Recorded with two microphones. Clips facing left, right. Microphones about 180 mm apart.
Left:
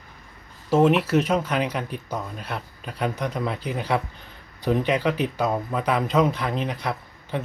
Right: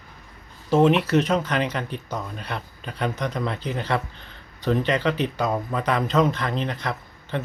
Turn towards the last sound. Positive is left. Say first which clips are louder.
# even
turn(degrees=10)  # may be behind; listen again after turning